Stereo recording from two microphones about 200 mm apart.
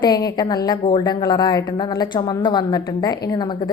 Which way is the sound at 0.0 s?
20° left (ahead or behind).